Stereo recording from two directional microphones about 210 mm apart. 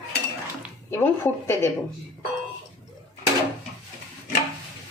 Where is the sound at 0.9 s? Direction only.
10° left (ahead or behind).